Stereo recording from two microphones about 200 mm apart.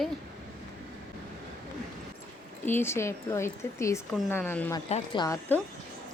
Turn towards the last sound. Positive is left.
turn(degrees=25)  # may be behind; listen again after turning